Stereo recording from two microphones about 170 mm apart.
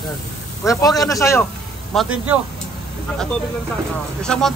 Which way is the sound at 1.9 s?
Centre (ahead or behind).